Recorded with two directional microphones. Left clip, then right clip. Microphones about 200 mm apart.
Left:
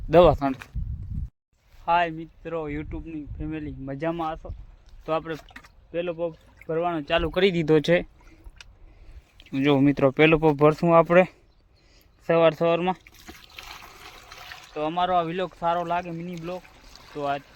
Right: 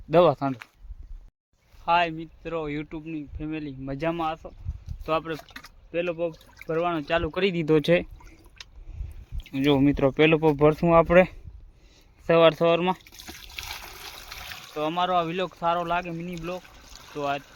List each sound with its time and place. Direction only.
0.1 s speech: 10° left (ahead or behind)
1.8 s speech: 5° right (ahead or behind)
5.5 s speech: 20° right (ahead or behind)
5.9 s speech: 5° right (ahead or behind)
7.3 s speech: 25° left (ahead or behind)
7.6 s speech: 5° left (ahead or behind)
9.5 s speech: 5° left (ahead or behind)
13.2 s trickle: 20° right (ahead or behind)
14.8 s speech: centre (ahead or behind)